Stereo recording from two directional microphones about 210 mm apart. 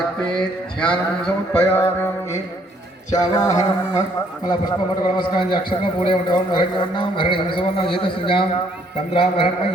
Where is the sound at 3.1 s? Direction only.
20° left (ahead or behind).